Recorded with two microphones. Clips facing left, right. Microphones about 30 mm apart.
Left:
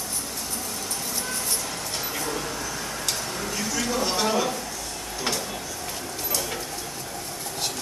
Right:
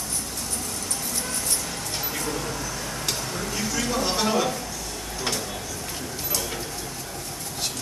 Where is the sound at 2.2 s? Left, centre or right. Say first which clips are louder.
Even; centre.